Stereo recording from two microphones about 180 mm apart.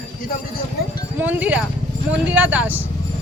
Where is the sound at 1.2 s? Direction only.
10° right (ahead or behind).